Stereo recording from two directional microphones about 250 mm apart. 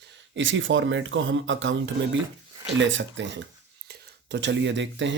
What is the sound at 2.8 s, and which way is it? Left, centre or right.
Speech, right.